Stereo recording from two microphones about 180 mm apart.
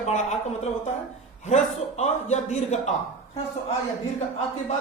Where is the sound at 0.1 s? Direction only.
40° left (ahead or behind).